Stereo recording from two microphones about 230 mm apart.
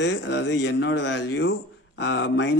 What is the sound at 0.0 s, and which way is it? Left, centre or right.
Speech, left.